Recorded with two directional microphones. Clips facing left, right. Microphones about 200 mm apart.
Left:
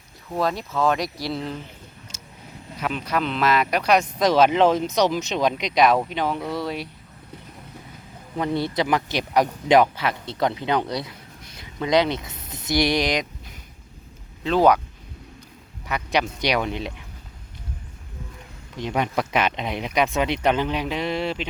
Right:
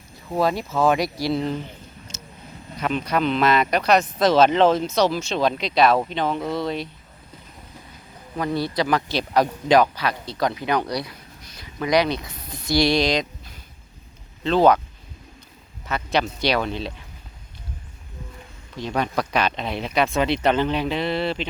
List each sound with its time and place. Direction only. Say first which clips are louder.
0.3 s speech: right 3 dB; 5° right (ahead or behind)
2.1 s vehicle: right 4 dB; 10° left (ahead or behind)
2.7 s speech: right 2 dB; 5° left (ahead or behind)
8.4 s speech: even; 20° left (ahead or behind)
15.9 s speech: right 1 dB; 15° left (ahead or behind)
18.8 s speech: even; 15° left (ahead or behind)